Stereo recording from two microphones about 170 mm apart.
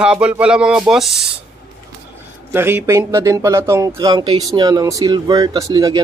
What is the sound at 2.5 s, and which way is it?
A man's voice, 15° right (ahead or behind).